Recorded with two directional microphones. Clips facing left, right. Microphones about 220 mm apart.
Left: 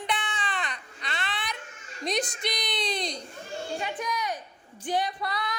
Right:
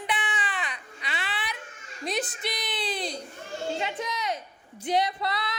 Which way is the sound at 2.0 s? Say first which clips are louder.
Left 1 dB; 5° right (ahead or behind).